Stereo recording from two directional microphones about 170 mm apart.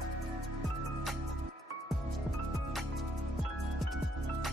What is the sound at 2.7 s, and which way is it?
Music, centre (ahead or behind).